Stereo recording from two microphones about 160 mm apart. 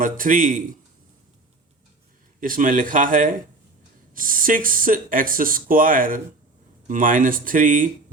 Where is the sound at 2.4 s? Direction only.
60° right (ahead or behind).